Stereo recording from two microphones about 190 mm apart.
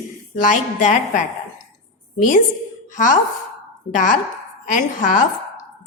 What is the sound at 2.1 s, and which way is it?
A woman's voice, 45° left (ahead or behind).